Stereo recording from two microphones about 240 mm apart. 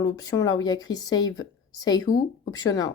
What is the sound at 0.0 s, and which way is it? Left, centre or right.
Speech, centre.